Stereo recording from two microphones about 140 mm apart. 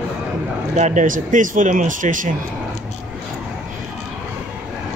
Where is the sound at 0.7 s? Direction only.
60° right (ahead or behind).